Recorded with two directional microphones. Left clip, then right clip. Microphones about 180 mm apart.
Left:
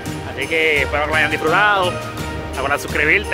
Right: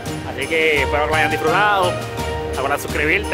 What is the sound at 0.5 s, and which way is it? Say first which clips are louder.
Speech: even; 15° right (ahead or behind).